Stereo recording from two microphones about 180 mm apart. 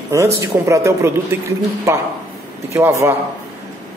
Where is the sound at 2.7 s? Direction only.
15° right (ahead or behind).